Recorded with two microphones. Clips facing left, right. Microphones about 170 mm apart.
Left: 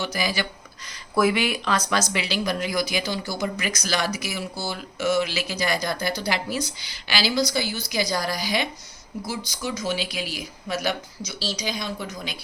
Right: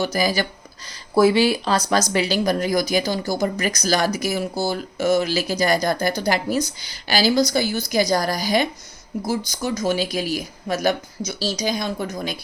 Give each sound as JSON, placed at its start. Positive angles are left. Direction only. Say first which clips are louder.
{"t": 0.0, "sound": "speech", "louder": "right 6 dB", "side_deg": -40}
{"t": 1.1, "sound": "speech", "louder": "right 6 dB", "side_deg": -30}